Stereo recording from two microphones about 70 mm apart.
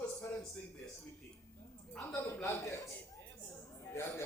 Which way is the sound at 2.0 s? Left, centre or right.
Left.